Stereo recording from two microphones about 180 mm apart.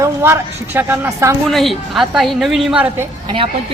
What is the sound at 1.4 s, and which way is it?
A woman's voice, centre (ahead or behind).